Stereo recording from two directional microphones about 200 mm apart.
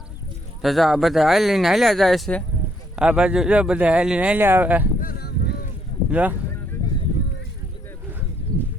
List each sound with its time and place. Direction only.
0.6 s speech: centre (ahead or behind)
4.9 s a sound: 50° left (ahead or behind)
6.1 s speech: 10° right (ahead or behind)